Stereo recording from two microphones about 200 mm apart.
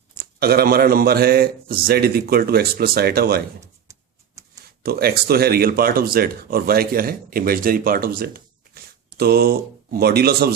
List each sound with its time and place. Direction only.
0.2 s speech: 50° right (ahead or behind)
4.8 s speech: 50° right (ahead or behind)